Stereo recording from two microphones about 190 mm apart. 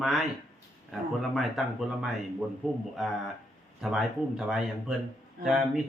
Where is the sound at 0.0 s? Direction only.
Centre (ahead or behind).